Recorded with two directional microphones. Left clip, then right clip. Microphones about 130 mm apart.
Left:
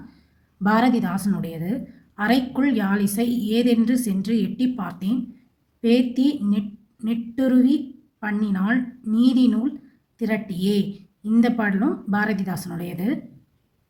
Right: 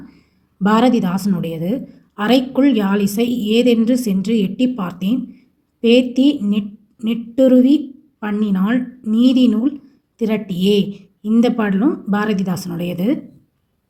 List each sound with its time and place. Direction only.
0.6 s a woman's voice: 25° right (ahead or behind)